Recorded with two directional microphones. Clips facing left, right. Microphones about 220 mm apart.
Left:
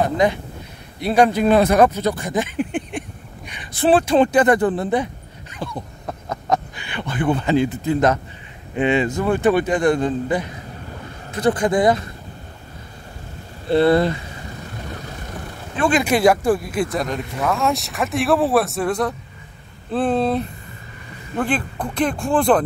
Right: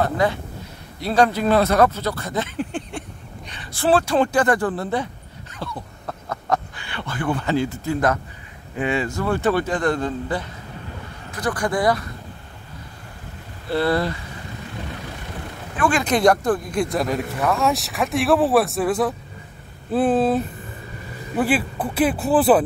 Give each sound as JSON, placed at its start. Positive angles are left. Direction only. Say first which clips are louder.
{"t": 0.0, "sound": "speech", "louder": "left 2 dB", "side_deg": 15}
{"t": 13.7, "sound": "speech", "louder": "left 6 dB", "side_deg": 20}
{"t": 16.0, "sound": "speech", "louder": "left 1 dB", "side_deg": 5}